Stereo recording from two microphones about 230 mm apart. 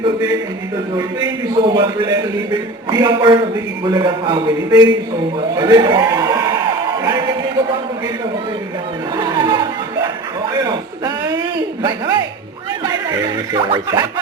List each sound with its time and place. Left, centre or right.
0.0 s a man's voice: centre
7.0 s music: centre
9.1 s a sound: centre
11.8 s a man's voice: centre